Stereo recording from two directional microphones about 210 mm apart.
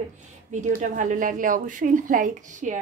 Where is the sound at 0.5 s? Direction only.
35° right (ahead or behind).